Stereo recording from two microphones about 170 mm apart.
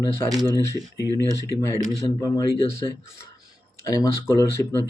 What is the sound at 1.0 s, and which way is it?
Speech, 20° right (ahead or behind).